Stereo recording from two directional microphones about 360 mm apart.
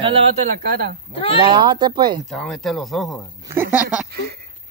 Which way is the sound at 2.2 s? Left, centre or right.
Centre.